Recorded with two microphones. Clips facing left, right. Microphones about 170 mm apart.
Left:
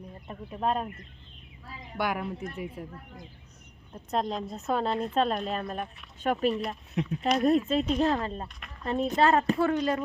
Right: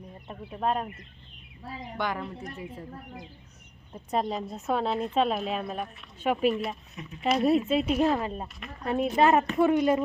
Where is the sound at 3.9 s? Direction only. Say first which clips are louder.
Right 1 dB; 5° right (ahead or behind).